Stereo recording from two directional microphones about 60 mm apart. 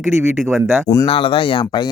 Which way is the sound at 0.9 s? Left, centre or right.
Left.